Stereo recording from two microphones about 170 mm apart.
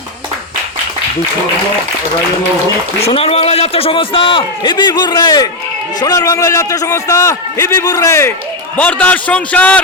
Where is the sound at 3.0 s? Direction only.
35° left (ahead or behind).